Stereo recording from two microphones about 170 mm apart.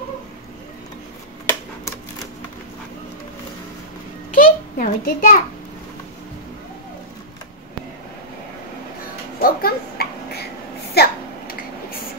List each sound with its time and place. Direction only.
1.4 s typewriter: 15° left (ahead or behind)
4.4 s a child's voice: 50° left (ahead or behind)
9.4 s a sound: 60° left (ahead or behind)